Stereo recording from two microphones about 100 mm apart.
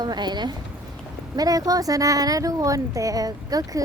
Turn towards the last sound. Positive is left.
turn(degrees=-35)  # may be behind; listen again after turning